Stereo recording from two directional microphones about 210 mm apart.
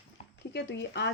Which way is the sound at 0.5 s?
55° left (ahead or behind).